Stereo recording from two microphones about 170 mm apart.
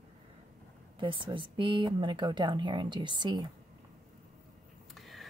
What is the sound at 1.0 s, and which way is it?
Speech, 30° right (ahead or behind).